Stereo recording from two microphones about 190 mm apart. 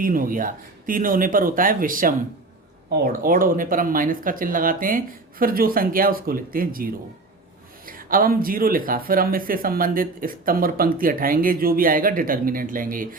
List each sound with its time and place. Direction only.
0.0 s speech: 45° right (ahead or behind)